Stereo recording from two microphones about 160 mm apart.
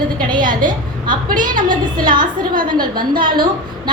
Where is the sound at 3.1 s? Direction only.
30° right (ahead or behind).